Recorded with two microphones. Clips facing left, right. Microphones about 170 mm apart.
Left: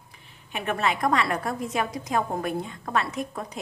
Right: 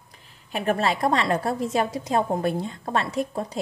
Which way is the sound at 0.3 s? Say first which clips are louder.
Right 5 dB; 35° right (ahead or behind).